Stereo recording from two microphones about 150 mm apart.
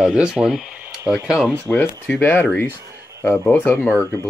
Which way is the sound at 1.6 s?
15° left (ahead or behind).